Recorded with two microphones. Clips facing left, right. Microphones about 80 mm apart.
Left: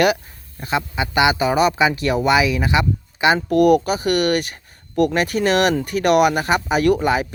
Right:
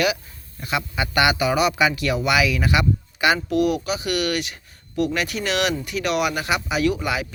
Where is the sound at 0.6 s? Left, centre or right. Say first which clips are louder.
Left 4 dB; left.